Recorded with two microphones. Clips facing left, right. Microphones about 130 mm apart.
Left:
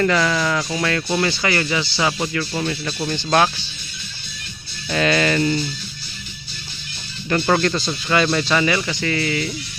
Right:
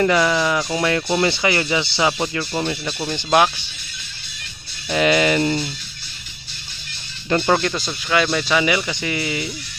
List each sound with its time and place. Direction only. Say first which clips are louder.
0.0 s speech: right 2 dB; 15° right (ahead or behind)
2.8 s speech: left 1 dB; 10° right (ahead or behind)
4.9 s speech: right 2 dB; 15° right (ahead or behind)
5.4 s speech: even; 30° right (ahead or behind)
7.4 s speech: left 4 dB; 5° right (ahead or behind)